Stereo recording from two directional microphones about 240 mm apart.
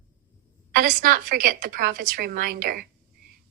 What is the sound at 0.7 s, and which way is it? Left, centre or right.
A woman's voice, right.